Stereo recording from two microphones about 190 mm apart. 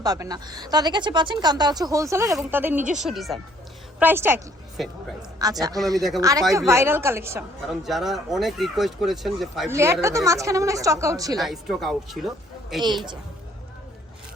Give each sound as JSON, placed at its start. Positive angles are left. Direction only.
{"t": 0.0, "sound": "speech", "side_deg": -20}
{"t": 4.0, "sound": "a woman's voice", "side_deg": -10}
{"t": 4.8, "sound": "speech", "side_deg": 0}
{"t": 5.4, "sound": "a woman's voice", "side_deg": -20}
{"t": 7.7, "sound": "speech", "side_deg": 0}
{"t": 9.6, "sound": "a woman's voice", "side_deg": -15}
{"t": 11.3, "sound": "speech", "side_deg": 0}